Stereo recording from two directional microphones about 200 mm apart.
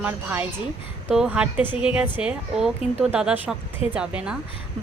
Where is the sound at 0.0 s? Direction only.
10° right (ahead or behind).